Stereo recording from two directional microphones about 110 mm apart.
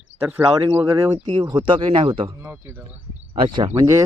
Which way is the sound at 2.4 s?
20° right (ahead or behind).